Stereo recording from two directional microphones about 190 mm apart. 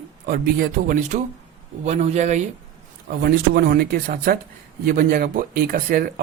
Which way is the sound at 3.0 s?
50° right (ahead or behind).